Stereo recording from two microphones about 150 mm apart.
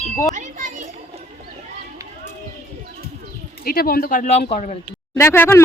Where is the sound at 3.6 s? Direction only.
80° left; by 4.7 s 50° left (ahead or behind).